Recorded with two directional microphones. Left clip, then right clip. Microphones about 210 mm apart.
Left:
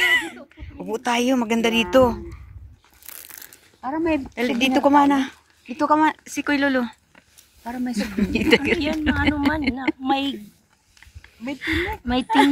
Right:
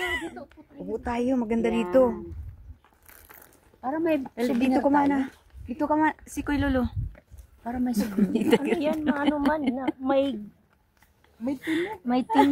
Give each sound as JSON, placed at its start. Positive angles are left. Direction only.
{"t": 0.0, "sound": "caw", "side_deg": 15}
{"t": 0.9, "sound": "a woman's voice", "side_deg": 15}
{"t": 3.1, "sound": "crushing", "side_deg": 35}
{"t": 3.8, "sound": "speech", "side_deg": 0}
{"t": 4.6, "sound": "a woman's voice", "side_deg": 10}
{"t": 5.8, "sound": "speech", "side_deg": 0}
{"t": 10.0, "sound": "speech", "side_deg": -30}
{"t": 11.6, "sound": "speech", "side_deg": 0}